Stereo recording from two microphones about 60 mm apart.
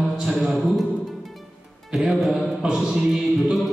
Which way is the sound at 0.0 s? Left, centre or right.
Centre.